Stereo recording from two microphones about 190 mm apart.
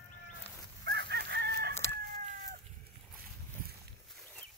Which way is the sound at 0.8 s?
60° right (ahead or behind).